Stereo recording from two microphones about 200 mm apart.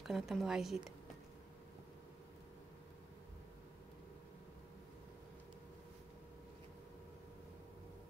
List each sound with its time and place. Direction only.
0.0 s a woman's voice: centre (ahead or behind)